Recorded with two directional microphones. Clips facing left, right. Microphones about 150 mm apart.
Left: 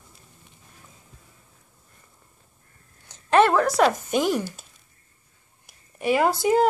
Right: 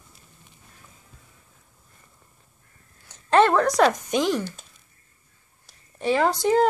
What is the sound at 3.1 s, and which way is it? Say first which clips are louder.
Speech: even; 10° left (ahead or behind).